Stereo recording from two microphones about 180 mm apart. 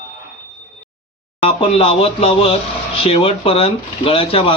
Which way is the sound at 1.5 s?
30° left (ahead or behind).